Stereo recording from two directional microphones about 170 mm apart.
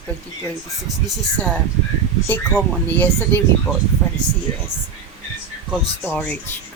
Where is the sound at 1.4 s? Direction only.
10° left (ahead or behind).